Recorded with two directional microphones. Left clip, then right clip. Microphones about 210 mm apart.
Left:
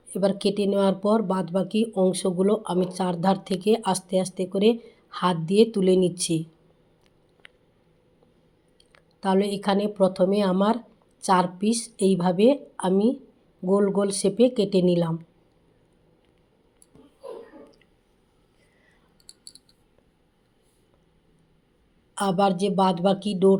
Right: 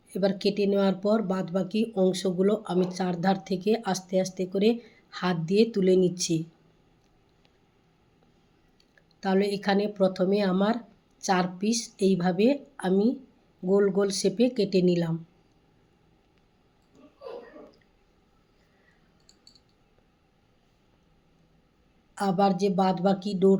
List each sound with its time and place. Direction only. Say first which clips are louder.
0.1 s speech: left 3 dB; 5° left (ahead or behind)
9.2 s speech: left 2 dB; 10° left (ahead or behind)
19.3 s a sound: left 8 dB; 50° left (ahead or behind)
22.1 s speech: left 2 dB; 15° left (ahead or behind)